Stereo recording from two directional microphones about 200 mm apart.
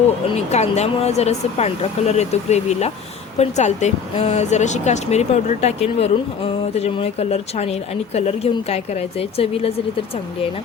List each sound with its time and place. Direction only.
0.3 s speech: 35° left (ahead or behind)